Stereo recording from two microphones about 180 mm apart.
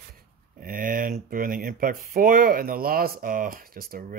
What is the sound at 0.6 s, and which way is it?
Speech, 50° right (ahead or behind).